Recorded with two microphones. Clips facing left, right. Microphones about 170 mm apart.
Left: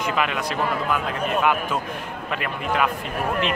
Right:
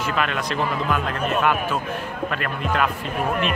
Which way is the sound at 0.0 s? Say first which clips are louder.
Even; 15° left (ahead or behind).